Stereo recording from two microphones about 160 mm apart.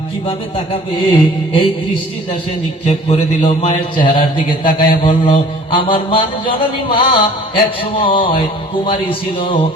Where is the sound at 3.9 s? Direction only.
30° left (ahead or behind).